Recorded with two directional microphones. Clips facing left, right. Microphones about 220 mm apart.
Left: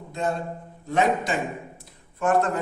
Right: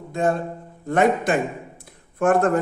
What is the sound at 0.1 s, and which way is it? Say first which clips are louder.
A man's voice: right 5 dB; 50° right (ahead or behind).